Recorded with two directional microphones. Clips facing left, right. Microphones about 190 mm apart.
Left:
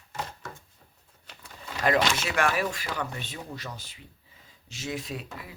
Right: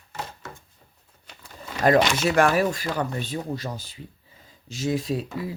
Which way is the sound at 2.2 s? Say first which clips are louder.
Right 7 dB; 40° right (ahead or behind).